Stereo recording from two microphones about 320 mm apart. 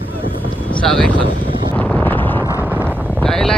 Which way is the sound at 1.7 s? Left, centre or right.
Centre.